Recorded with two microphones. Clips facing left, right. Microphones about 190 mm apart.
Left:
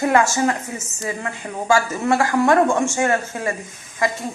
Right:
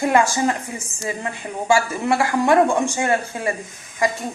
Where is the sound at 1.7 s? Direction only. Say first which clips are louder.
Left 1 dB; 10° right (ahead or behind).